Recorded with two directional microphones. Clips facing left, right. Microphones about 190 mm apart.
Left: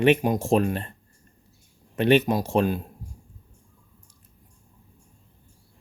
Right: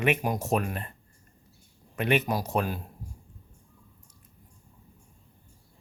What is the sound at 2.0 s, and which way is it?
Speech, 30° left (ahead or behind).